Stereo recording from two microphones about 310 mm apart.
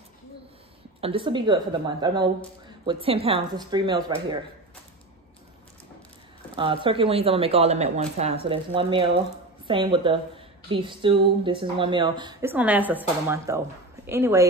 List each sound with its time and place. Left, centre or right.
1.0 s a woman's voice: centre
6.5 s a woman's voice: centre